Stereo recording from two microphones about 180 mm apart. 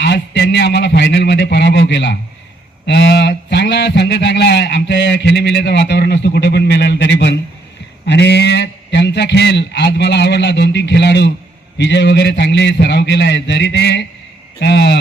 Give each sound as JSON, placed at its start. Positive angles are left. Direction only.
{"t": 0.0, "sound": "a man's voice", "side_deg": 70}